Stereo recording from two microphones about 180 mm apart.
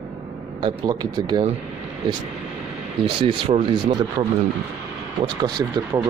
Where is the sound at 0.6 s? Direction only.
25° right (ahead or behind).